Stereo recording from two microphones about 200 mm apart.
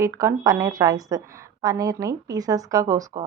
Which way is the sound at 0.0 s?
15° right (ahead or behind).